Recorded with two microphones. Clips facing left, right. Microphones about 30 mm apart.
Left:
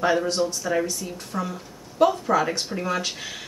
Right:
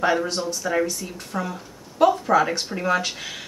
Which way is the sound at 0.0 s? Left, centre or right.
Centre.